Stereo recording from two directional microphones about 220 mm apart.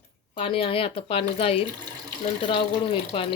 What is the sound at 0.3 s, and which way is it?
Speech, 25° left (ahead or behind).